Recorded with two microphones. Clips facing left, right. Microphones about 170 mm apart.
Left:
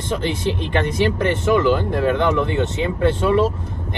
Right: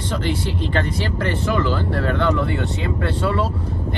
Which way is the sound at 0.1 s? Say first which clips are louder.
Left 3 dB; 20° left (ahead or behind).